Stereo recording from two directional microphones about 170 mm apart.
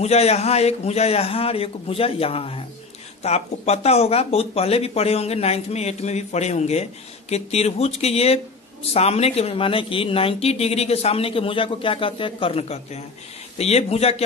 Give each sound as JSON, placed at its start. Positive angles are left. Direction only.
{"t": 0.0, "sound": "speech", "side_deg": 40}